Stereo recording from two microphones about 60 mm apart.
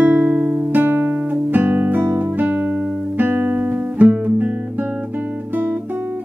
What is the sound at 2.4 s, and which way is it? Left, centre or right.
Music, right.